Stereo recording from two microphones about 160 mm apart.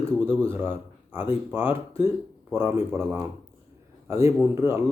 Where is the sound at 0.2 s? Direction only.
15° right (ahead or behind).